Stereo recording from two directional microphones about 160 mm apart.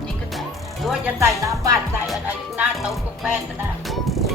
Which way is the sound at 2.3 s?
5° right (ahead or behind).